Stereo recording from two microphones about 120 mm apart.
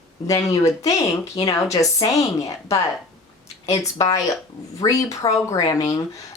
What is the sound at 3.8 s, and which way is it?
A woman's voice, 30° left (ahead or behind).